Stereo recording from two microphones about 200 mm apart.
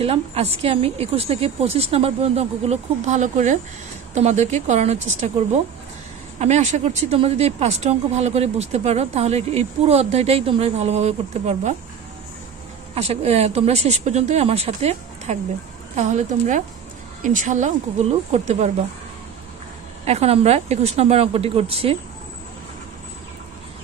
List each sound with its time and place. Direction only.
0.0 s speech: 30° right (ahead or behind)
12.9 s speech: 30° right (ahead or behind)
20.1 s speech: 30° right (ahead or behind)